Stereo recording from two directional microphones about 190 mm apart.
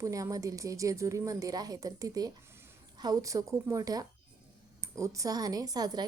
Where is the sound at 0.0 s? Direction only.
15° right (ahead or behind).